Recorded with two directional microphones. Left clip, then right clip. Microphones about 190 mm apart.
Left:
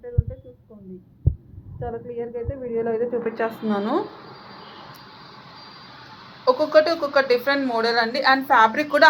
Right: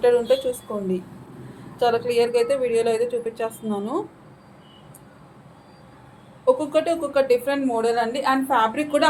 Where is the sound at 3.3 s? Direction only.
5° left (ahead or behind).